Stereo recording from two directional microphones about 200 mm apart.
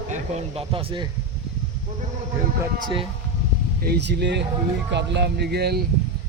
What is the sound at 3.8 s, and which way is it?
Speech, 55° right (ahead or behind).